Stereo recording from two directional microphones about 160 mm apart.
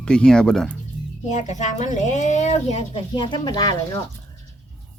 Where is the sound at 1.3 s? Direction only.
50° left (ahead or behind).